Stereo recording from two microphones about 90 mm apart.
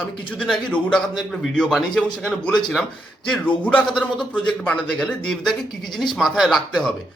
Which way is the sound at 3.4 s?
20° left (ahead or behind).